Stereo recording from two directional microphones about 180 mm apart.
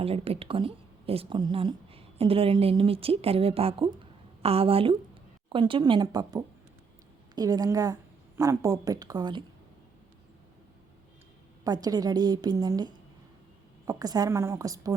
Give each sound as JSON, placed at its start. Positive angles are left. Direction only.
{"t": 0.0, "sound": "a woman's voice", "side_deg": -35}
{"t": 11.6, "sound": "a woman's voice", "side_deg": -20}